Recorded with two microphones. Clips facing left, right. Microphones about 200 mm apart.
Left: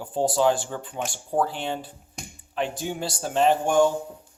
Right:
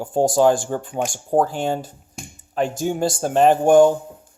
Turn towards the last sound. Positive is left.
turn(degrees=-50)  # may be behind; listen again after turning